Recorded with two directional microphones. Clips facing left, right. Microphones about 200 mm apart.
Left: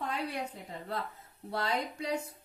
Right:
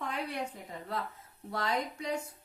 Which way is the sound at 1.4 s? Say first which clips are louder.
Even; 30° left (ahead or behind).